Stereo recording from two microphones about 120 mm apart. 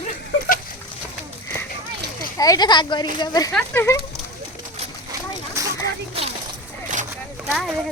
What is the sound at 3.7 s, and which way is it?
Speech, 20° left (ahead or behind).